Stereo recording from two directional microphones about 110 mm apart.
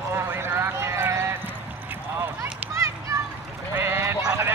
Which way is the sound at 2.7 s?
30° right (ahead or behind).